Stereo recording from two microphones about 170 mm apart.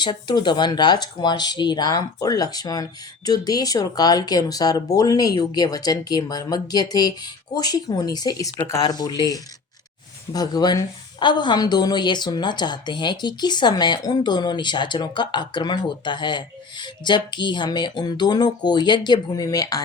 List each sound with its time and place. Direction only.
0.0 s a woman's voice: 25° left (ahead or behind)